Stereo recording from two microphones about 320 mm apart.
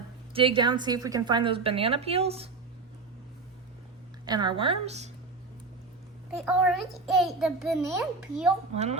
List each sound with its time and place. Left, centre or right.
0.3 s a woman's voice: centre
4.3 s a woman's voice: centre
6.3 s a child's voice: centre
8.7 s speech: centre